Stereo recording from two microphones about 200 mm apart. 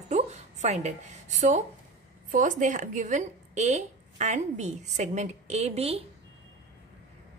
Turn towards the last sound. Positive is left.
turn(degrees=-30)  # may be behind; listen again after turning